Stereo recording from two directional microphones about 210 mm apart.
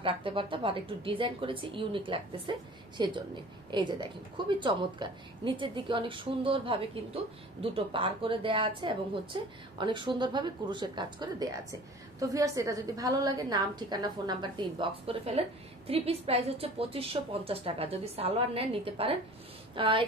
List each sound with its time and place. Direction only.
0.0 s speech: 25° right (ahead or behind)